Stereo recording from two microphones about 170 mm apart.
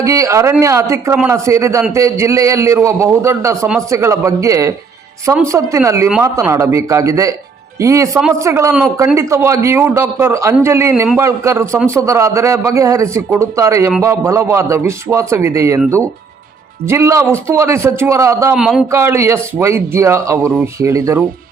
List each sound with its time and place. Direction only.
0.0 s speech: 20° right (ahead or behind)
16.9 s speech: 15° right (ahead or behind)
18.5 s speech: 5° right (ahead or behind)
18.9 s speech: 15° right (ahead or behind)